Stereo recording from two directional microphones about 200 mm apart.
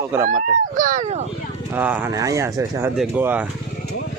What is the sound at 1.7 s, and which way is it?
Speech, 10° right (ahead or behind).